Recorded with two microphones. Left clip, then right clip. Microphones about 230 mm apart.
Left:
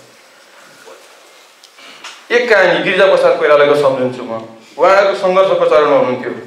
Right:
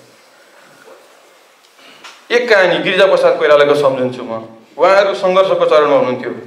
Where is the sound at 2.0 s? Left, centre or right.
Centre.